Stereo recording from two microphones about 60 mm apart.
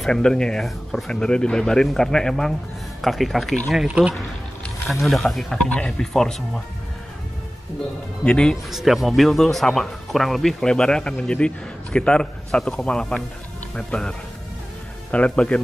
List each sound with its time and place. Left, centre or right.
0.0 s speech: centre
1.1 s speech: centre
5.6 s speech: centre
8.2 s speech: centre
8.6 s speech: centre